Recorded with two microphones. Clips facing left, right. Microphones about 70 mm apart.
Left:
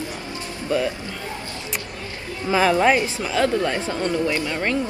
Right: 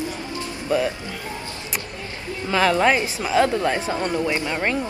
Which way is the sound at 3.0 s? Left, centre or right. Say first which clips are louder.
Right 2 dB; centre.